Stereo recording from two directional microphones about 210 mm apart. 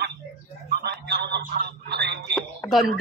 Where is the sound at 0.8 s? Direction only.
55° right (ahead or behind).